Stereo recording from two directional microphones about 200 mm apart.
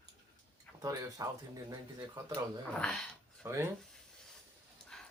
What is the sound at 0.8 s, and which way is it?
Speech, 20° right (ahead or behind).